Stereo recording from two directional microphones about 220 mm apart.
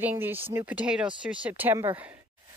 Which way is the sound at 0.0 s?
10° right (ahead or behind).